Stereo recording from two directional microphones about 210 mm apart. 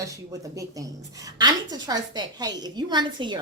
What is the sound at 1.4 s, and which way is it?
A woman's voice, 20° right (ahead or behind).